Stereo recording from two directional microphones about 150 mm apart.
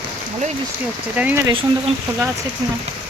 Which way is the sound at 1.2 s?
10° right (ahead or behind).